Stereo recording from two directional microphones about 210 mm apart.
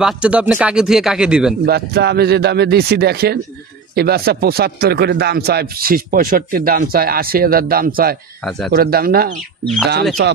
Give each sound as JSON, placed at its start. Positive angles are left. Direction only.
{"t": 0.0, "sound": "speech", "side_deg": -5}
{"t": 1.7, "sound": "speech", "side_deg": -50}